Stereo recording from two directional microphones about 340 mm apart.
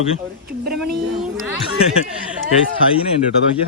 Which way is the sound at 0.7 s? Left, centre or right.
Centre.